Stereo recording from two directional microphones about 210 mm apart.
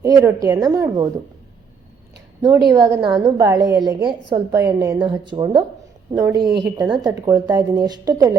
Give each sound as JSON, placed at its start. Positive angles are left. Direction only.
{"t": 0.0, "sound": "a woman's voice", "side_deg": -15}
{"t": 2.7, "sound": "a woman's voice", "side_deg": -20}